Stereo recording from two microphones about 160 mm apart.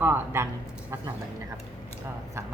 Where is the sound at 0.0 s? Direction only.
15° right (ahead or behind).